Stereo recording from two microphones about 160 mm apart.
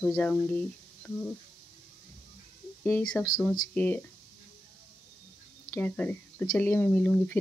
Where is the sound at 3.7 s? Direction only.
10° left (ahead or behind).